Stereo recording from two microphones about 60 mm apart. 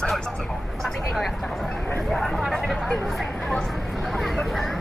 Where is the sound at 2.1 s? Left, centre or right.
Centre.